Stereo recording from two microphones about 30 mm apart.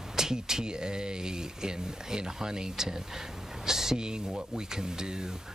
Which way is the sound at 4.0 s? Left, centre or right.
Right.